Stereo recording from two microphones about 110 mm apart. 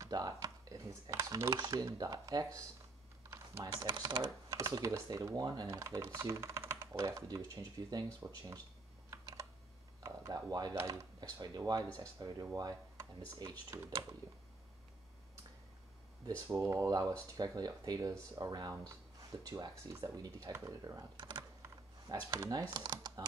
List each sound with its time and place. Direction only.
0.0 s computer keyboard: 35° right (ahead or behind)
1.6 s speech: 30° right (ahead or behind)
4.5 s typing: 30° right (ahead or behind)
4.8 s speech: 25° right (ahead or behind)
9.1 s computer keyboard: 25° right (ahead or behind)
10.0 s speech: 30° right (ahead or behind)
10.7 s speech: 25° right (ahead or behind)
16.3 s speech: 25° right (ahead or behind)
21.2 s speech: 40° right (ahead or behind)